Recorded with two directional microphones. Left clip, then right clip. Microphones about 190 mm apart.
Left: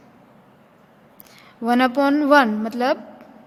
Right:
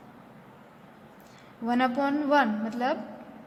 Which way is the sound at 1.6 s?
45° left (ahead or behind).